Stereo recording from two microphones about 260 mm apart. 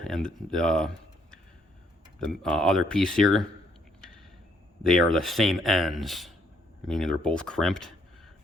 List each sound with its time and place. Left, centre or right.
0.0 s speech: centre
4.8 s speech: centre